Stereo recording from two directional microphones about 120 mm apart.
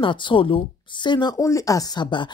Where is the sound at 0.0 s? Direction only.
45° left (ahead or behind).